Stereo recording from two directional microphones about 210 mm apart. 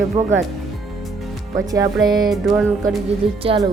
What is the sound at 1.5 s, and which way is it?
Speech, 15° right (ahead or behind).